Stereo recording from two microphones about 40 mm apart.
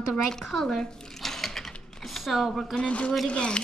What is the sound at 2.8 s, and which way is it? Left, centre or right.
Speech, left.